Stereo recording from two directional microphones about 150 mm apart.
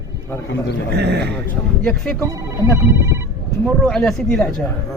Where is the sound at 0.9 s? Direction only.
90° right.